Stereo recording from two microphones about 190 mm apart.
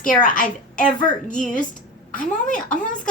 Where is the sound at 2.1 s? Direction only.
45° left (ahead or behind).